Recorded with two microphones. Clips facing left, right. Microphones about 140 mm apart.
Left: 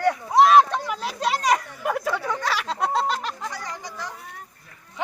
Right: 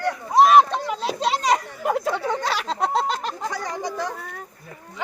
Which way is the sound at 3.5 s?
50° right (ahead or behind).